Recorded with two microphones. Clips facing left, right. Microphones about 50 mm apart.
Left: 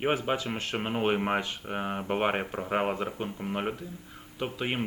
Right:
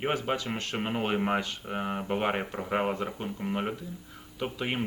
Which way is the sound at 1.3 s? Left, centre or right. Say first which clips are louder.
Even; centre.